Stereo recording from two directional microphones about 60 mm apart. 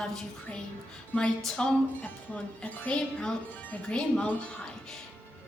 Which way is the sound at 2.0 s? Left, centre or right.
Left.